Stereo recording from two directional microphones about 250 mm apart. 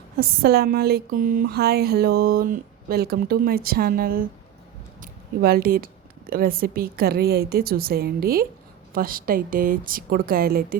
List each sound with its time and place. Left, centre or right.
0.2 s speech: right
5.4 s speech: right